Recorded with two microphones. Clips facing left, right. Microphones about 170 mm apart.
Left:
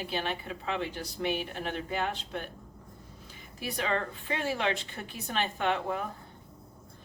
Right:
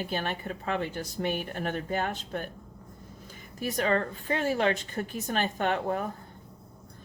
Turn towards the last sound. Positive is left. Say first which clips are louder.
# right 2 dB
turn(degrees=-45)  # may be behind; listen again after turning